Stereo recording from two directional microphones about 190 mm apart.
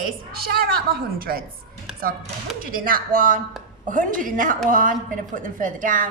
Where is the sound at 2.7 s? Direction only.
50° right (ahead or behind).